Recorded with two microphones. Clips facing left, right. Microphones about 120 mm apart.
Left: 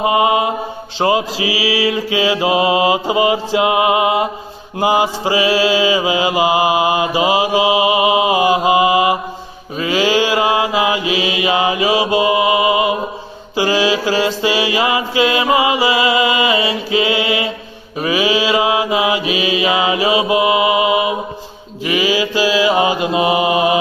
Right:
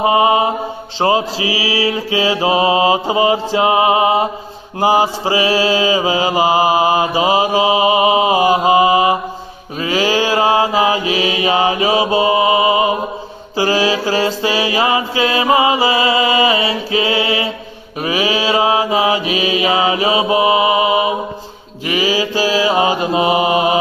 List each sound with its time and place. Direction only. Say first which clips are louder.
0.0 s mantra: right 1 dB; 30° right (ahead or behind)